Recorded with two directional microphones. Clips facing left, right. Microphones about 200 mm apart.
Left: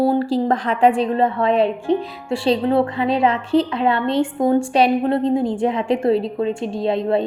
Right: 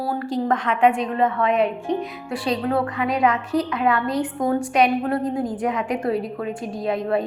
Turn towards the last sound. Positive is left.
turn(degrees=25)  # may be behind; listen again after turning